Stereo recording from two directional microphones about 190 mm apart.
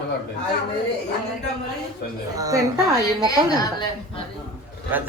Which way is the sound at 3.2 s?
20° left (ahead or behind).